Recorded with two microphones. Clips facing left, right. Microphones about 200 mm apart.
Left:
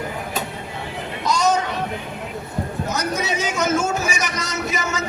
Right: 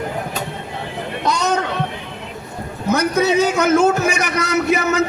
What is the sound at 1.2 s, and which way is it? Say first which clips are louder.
Music: even; 60° right (ahead or behind).